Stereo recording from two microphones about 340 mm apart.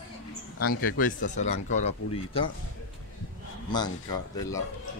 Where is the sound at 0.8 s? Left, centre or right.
Left.